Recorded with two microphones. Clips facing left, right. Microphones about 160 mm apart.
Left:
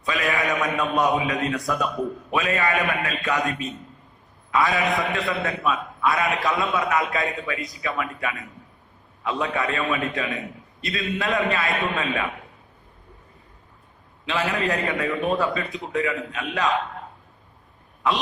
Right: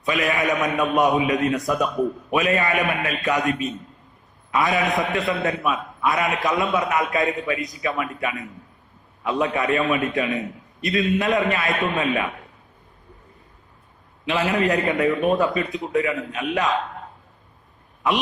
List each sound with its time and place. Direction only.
0.0 s a man's voice: 20° right (ahead or behind)
14.3 s a man's voice: 20° right (ahead or behind)